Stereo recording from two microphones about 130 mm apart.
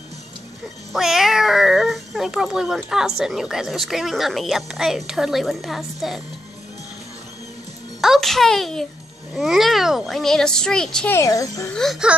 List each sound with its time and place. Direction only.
0.9 s speech: centre (ahead or behind)
8.0 s a child's voice: centre (ahead or behind)
11.1 s speech: 25° left (ahead or behind)
11.7 s speech: centre (ahead or behind)